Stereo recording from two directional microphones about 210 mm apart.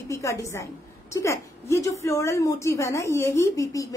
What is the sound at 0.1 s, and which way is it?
A woman's voice, 15° left (ahead or behind).